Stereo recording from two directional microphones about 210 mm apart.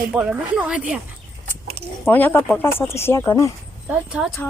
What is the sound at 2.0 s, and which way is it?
Speech, 10° left (ahead or behind).